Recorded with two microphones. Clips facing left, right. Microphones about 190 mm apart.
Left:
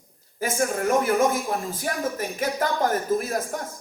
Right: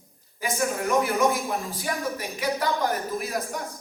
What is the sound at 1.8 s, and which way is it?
A man's voice, 45° left (ahead or behind).